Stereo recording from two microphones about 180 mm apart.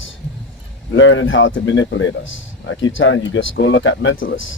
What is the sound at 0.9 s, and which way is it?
A man's voice, 90° left.